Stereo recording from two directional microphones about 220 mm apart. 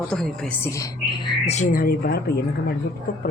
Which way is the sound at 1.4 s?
30° left (ahead or behind).